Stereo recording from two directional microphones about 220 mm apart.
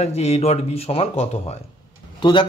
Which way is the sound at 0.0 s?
30° left (ahead or behind).